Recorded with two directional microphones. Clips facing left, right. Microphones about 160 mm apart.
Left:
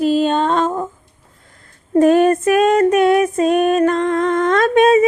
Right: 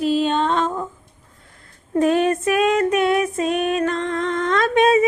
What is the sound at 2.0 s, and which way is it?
Female singing, 45° left (ahead or behind).